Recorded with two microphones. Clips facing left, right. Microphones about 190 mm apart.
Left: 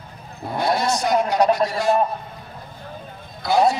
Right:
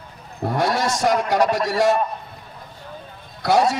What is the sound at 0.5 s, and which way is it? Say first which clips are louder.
A man's voice: even; 75° right (ahead or behind).